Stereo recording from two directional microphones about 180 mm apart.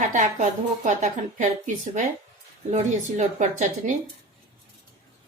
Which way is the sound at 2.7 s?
40° right (ahead or behind).